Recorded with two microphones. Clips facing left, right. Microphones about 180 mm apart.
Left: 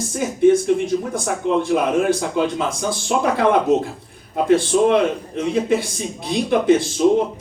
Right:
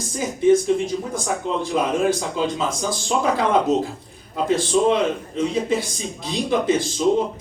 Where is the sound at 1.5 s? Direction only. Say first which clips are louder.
Left 5 dB; 60° left (ahead or behind).